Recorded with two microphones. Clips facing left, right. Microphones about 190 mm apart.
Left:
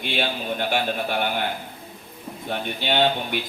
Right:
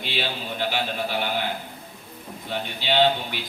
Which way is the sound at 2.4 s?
55° left (ahead or behind).